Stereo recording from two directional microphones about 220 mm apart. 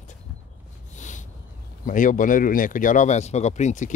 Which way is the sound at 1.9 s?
35° left (ahead or behind).